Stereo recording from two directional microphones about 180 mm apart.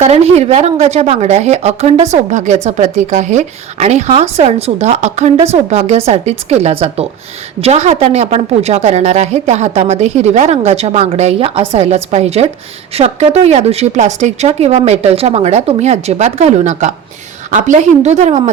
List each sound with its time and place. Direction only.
0.0 s a woman's voice: 35° right (ahead or behind)